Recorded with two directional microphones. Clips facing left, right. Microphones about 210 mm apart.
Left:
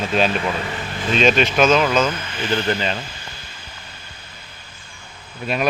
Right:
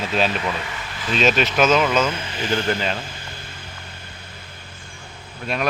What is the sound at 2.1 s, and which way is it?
Speech, 30° right (ahead or behind).